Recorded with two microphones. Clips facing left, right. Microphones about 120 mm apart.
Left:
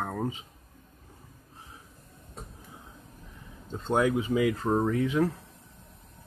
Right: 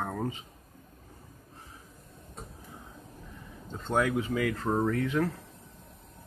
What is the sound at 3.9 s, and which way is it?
Speech, 15° left (ahead or behind).